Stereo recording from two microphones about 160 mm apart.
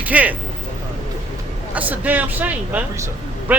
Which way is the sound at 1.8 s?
10° right (ahead or behind).